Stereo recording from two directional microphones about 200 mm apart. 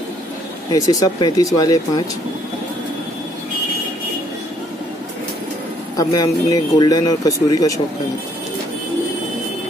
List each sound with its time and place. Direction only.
0.7 s speech: 20° left (ahead or behind)
5.9 s speech: 20° left (ahead or behind)